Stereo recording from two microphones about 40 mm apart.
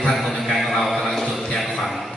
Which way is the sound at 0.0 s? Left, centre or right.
Centre.